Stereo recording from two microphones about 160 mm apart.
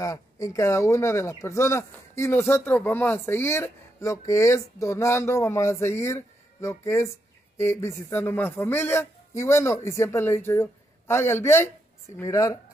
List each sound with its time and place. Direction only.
0.0 s speech: 20° left (ahead or behind)